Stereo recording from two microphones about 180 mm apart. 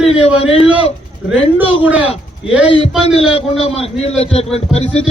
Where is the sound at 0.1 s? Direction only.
35° left (ahead or behind).